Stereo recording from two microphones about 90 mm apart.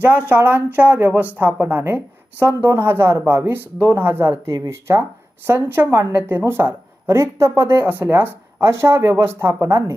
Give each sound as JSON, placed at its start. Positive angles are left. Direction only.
{"t": 0.0, "sound": "a woman's voice", "side_deg": -20}